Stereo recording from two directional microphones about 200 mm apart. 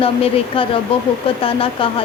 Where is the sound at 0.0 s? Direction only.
30° left (ahead or behind).